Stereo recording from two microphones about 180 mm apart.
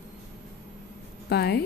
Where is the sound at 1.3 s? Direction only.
65° left (ahead or behind).